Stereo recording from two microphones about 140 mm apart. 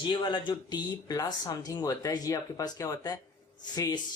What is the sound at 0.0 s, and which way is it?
Speech, 35° left (ahead or behind).